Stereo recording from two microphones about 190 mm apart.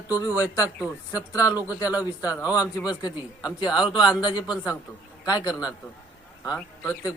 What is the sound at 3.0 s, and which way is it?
A man's voice, 20° left (ahead or behind).